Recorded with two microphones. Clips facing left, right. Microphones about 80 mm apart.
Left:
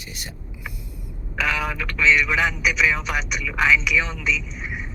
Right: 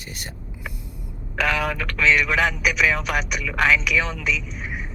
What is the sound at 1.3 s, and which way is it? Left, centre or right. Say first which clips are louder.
Speech: right 2 dB; right.